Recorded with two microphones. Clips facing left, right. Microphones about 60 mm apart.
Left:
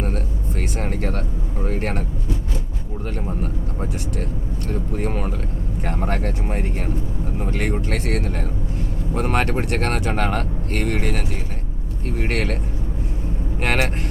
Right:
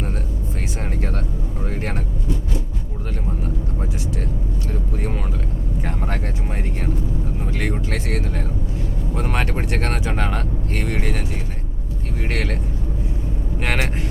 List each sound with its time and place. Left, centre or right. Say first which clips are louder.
0.8 s speech: left 2 dB; left
4.9 s vehicle: left 4 dB; left
5.8 s speech: left 4 dB; left
12.2 s speech: left 2 dB; left
13.6 s speech: left 2 dB; left